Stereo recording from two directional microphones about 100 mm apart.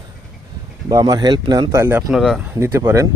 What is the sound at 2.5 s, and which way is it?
Speech, 30° right (ahead or behind).